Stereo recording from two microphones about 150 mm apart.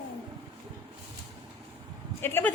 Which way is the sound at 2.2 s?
15° left (ahead or behind).